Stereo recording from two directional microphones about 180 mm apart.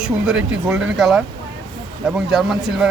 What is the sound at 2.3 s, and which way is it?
Speech, centre (ahead or behind).